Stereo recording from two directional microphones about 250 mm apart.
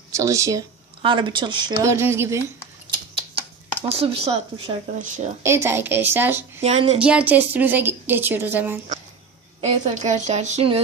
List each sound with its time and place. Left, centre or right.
0.1 s a woman's voice: centre
3.8 s speech: right
5.4 s a woman's voice: centre
6.6 s speech: right
7.0 s a woman's voice: centre
9.6 s speech: right